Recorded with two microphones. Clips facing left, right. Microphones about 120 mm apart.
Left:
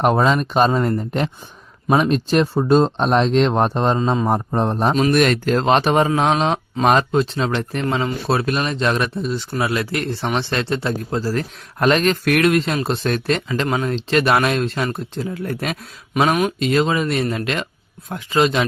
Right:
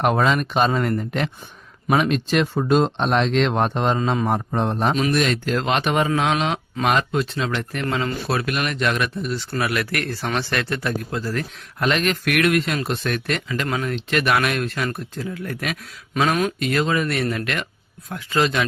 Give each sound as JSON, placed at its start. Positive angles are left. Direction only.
{"t": 0.0, "sound": "speech", "side_deg": 35}
{"t": 4.5, "sound": "speech", "side_deg": 35}
{"t": 5.1, "sound": "speech", "side_deg": 55}
{"t": 5.5, "sound": "speech", "side_deg": 35}